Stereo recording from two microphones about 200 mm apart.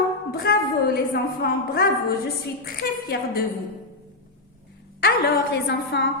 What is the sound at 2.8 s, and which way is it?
Speech, 55° left (ahead or behind).